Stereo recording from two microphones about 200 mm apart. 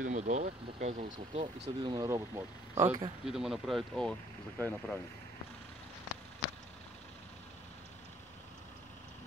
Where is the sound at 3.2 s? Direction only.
5° right (ahead or behind).